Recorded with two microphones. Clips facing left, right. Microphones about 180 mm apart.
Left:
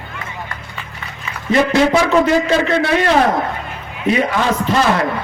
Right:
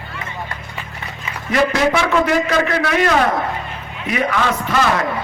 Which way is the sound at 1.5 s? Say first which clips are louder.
Left 3 dB; 30° left (ahead or behind).